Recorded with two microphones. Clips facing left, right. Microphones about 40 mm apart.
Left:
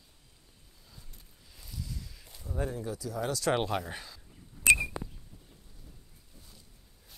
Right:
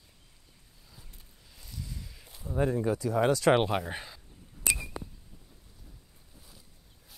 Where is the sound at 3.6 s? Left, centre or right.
Centre.